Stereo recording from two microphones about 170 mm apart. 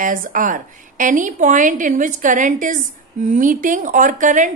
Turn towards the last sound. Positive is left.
turn(degrees=-50)  # may be behind; listen again after turning